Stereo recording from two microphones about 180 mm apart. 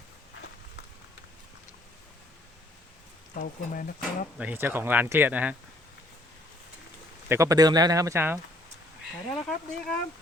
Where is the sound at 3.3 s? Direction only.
50° left (ahead or behind).